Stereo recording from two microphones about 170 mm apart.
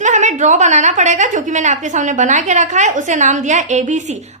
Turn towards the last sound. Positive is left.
turn(degrees=-45)  # may be behind; listen again after turning